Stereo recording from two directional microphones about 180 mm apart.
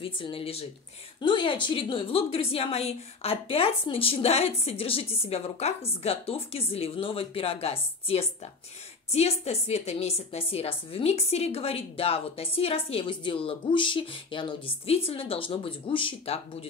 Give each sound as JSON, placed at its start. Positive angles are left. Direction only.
{"t": 0.0, "sound": "a woman's voice", "side_deg": 30}